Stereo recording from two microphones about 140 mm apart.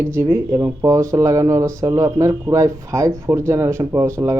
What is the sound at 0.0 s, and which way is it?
Speech, 20° right (ahead or behind).